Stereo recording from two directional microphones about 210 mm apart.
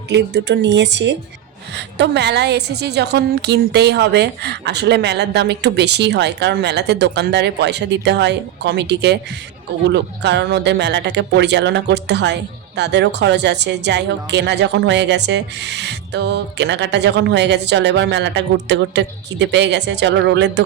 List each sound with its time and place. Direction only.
0.1 s a woman's voice: 55° right (ahead or behind)